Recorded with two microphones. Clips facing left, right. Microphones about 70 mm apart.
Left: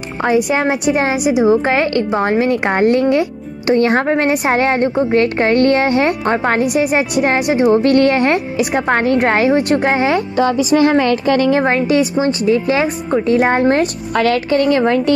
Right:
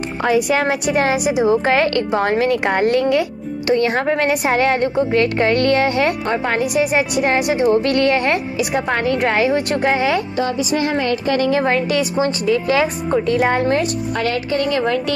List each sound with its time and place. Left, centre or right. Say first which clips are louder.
0.2 s a woman's voice: left 2 dB; left
10.3 s speech: left 6 dB; left
11.6 s a woman's voice: left 4 dB; left
14.1 s speech: left 8 dB; left